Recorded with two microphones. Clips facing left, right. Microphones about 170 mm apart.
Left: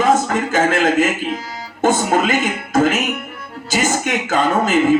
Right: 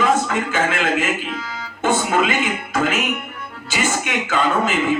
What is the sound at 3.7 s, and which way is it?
Speech, 45° left (ahead or behind).